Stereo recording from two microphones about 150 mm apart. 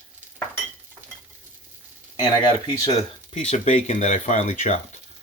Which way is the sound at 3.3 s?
50° left (ahead or behind).